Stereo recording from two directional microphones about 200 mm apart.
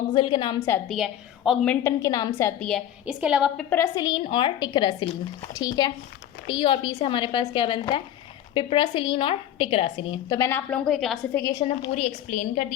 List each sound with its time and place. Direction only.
0.1 s a woman's voice: 25° left (ahead or behind)
0.9 s a woman's voice: centre (ahead or behind); by 2.5 s 20° left (ahead or behind)
2.6 s a woman's voice: centre (ahead or behind)
3.7 s a woman's voice: 15° left (ahead or behind)
11.6 s a woman's voice: 30° left (ahead or behind)